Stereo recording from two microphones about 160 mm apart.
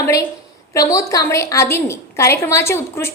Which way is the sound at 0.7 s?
20° left (ahead or behind).